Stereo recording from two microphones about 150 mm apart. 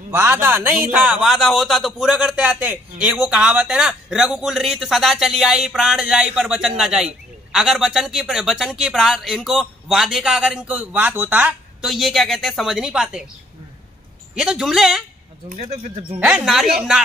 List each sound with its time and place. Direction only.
0.1 s a man's voice: 15° right (ahead or behind)
14.3 s a man's voice: 5° right (ahead or behind)
15.5 s speech: 50° right (ahead or behind)
16.2 s a man's voice: 5° right (ahead or behind)